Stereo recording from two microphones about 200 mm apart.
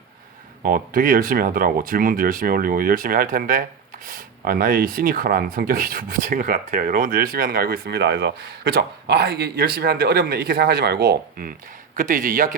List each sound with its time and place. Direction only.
0.6 s a man's voice: 45° right (ahead or behind)